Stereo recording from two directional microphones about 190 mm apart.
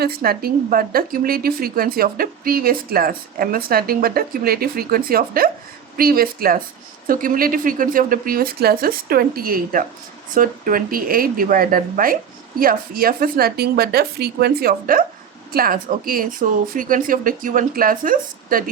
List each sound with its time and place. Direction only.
0.0 s speech: 50° right (ahead or behind)